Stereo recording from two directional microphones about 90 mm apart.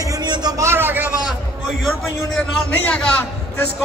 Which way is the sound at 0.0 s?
40° right (ahead or behind).